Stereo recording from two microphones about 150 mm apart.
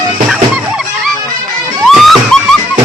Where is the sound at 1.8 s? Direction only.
Centre (ahead or behind).